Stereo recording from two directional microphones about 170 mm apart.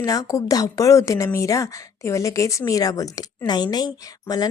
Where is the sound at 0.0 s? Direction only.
20° left (ahead or behind).